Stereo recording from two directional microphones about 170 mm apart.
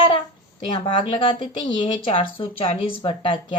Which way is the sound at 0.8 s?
30° left (ahead or behind).